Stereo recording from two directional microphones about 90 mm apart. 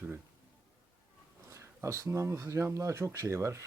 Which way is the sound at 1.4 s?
35° right (ahead or behind).